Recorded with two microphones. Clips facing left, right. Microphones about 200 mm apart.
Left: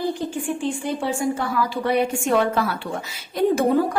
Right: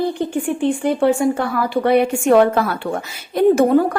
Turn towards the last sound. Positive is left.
turn(degrees=-60)  # may be behind; listen again after turning